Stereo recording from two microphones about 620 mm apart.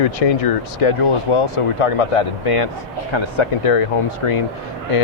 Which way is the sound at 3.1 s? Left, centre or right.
Left.